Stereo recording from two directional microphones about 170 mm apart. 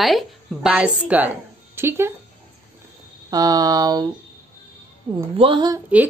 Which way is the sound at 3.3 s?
20° right (ahead or behind).